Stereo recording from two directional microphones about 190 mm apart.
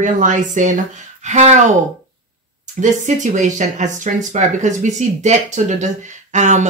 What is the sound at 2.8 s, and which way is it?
Speech, 40° right (ahead or behind).